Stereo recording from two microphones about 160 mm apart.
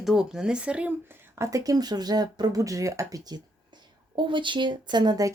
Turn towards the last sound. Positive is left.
turn(degrees=-25)  # may be behind; listen again after turning